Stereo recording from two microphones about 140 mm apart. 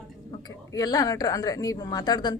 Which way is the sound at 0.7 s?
25° left (ahead or behind).